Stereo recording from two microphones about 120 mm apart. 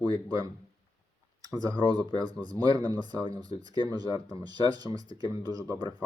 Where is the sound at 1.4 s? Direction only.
30° right (ahead or behind).